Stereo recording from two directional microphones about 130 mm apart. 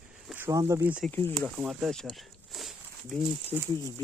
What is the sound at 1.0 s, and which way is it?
Speech, 15° left (ahead or behind).